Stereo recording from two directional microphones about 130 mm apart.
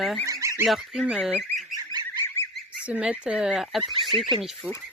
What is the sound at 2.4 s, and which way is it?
Goose, 15° left (ahead or behind).